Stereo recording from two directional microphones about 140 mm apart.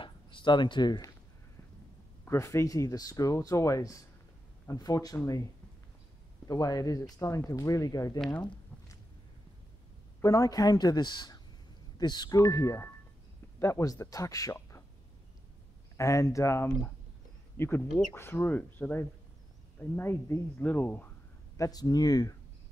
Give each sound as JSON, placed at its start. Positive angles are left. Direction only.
{"t": 0.0, "sound": "speech", "side_deg": 35}
{"t": 2.2, "sound": "speech", "side_deg": 20}
{"t": 8.2, "sound": "speech", "side_deg": 10}
{"t": 10.2, "sound": "speech", "side_deg": 25}
{"t": 16.0, "sound": "speech", "side_deg": 20}
{"t": 21.5, "sound": "speech", "side_deg": 25}